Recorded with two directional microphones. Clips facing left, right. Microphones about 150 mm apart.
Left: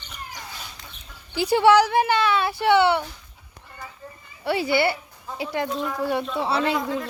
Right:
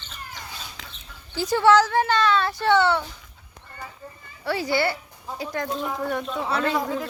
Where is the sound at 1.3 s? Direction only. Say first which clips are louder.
Left 1 dB; 15° left (ahead or behind).